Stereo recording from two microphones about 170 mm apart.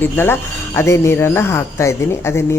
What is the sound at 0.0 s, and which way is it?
Speech, 10° left (ahead or behind).